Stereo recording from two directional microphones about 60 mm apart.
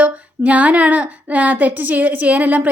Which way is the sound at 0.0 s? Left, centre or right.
Right.